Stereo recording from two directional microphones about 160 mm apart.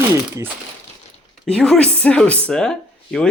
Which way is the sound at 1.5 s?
5° left (ahead or behind).